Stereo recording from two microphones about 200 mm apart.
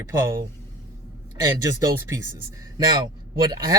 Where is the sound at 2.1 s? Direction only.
15° right (ahead or behind).